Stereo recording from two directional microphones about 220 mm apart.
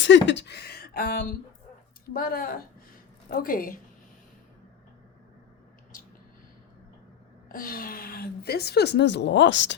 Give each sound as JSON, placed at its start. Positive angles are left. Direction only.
{"t": 0.0, "sound": "a sound", "side_deg": 55}
{"t": 2.1, "sound": "a woman's voice", "side_deg": 40}
{"t": 7.4, "sound": "a woman's voice", "side_deg": 40}